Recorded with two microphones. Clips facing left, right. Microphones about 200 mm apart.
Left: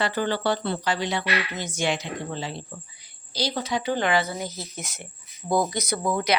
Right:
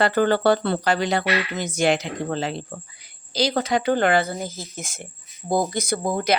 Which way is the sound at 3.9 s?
55° right (ahead or behind).